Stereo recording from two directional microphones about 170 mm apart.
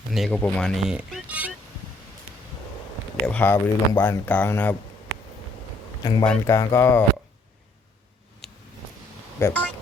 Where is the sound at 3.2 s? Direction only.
10° left (ahead or behind).